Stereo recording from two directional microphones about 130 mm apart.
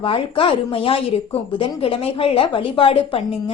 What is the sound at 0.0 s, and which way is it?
Speech, 40° left (ahead or behind).